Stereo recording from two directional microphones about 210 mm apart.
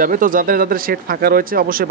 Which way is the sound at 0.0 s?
40° right (ahead or behind).